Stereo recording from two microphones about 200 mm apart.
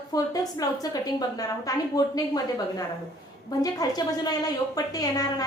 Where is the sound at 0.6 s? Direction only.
20° left (ahead or behind).